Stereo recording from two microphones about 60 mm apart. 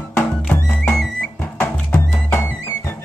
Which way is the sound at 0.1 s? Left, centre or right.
Left.